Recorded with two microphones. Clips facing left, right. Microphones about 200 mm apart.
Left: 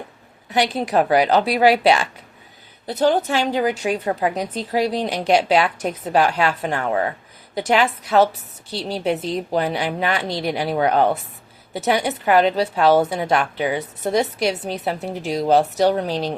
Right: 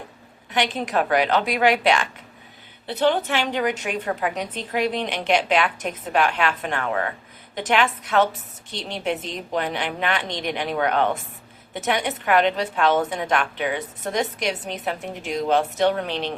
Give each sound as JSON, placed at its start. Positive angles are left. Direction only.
{"t": 0.5, "sound": "a woman's voice", "side_deg": 35}